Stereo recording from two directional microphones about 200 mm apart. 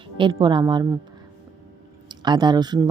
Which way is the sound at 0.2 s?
25° right (ahead or behind).